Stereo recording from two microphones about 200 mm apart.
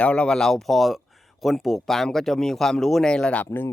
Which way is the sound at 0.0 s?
5° left (ahead or behind).